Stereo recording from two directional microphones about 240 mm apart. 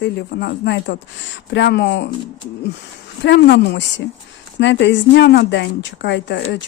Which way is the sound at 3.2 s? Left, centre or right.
Left.